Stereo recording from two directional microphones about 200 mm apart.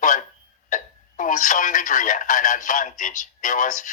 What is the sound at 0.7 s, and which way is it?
Speech, 40° left (ahead or behind).